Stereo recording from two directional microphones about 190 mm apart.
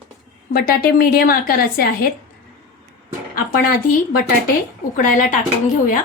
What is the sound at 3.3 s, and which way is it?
Speech, 50° left (ahead or behind).